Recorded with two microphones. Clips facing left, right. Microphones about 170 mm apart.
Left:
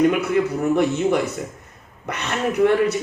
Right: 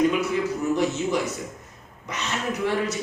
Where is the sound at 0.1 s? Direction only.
60° left (ahead or behind).